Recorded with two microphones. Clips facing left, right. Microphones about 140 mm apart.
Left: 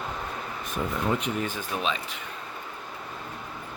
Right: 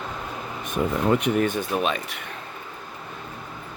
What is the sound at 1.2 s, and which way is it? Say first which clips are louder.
Speech: right 8 dB; 65° right (ahead or behind).